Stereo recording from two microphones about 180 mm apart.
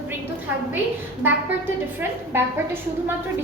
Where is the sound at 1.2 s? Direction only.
10° right (ahead or behind).